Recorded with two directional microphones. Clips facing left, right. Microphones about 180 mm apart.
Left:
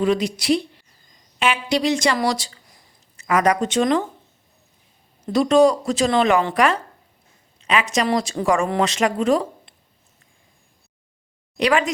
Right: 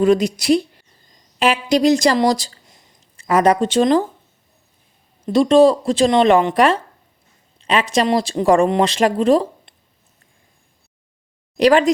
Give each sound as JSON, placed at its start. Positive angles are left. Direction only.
{"t": 0.0, "sound": "a woman's voice", "side_deg": -45}
{"t": 2.6, "sound": "a sound", "side_deg": -25}
{"t": 5.2, "sound": "a woman's voice", "side_deg": -25}
{"t": 11.5, "sound": "a woman's voice", "side_deg": -35}